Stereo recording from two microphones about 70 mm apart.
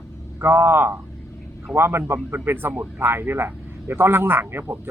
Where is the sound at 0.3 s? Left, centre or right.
Right.